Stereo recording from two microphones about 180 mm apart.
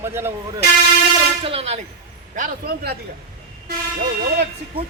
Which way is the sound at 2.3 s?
50° right (ahead or behind).